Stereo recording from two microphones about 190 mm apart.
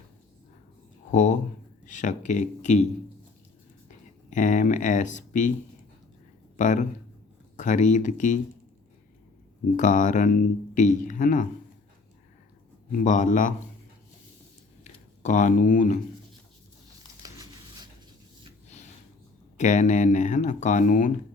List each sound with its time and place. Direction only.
1.1 s speech: 40° left (ahead or behind)
4.3 s speech: 40° left (ahead or behind)
6.6 s speech: 40° left (ahead or behind)
9.7 s speech: 40° left (ahead or behind)
13.0 s speech: 40° left (ahead or behind)
15.2 s speech: 40° left (ahead or behind)
17.3 s a sound: 20° right (ahead or behind)
19.5 s speech: 40° left (ahead or behind)